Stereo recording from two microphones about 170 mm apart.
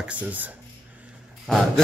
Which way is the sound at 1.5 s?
Centre (ahead or behind).